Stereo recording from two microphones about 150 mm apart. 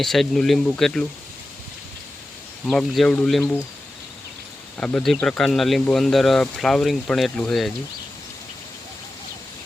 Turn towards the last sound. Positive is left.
turn(degrees=5)  # may be behind; listen again after turning